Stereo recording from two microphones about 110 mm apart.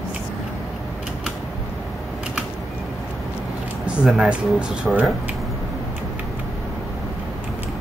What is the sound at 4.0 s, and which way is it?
Speech, 5° right (ahead or behind).